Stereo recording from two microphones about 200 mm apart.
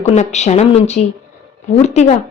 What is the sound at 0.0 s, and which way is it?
A woman's voice, 35° left (ahead or behind).